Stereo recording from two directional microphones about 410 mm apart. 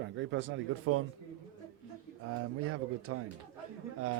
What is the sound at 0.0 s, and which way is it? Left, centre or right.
Speech, right.